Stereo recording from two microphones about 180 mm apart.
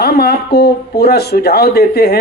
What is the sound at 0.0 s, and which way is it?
Speech, 65° left (ahead or behind).